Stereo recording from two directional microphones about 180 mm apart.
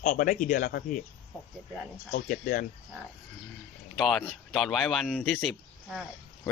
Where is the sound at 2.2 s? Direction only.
50° left (ahead or behind).